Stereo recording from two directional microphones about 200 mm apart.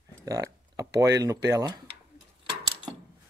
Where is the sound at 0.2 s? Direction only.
15° right (ahead or behind).